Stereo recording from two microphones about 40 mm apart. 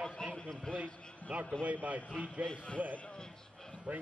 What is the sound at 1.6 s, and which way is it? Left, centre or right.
Speech, right.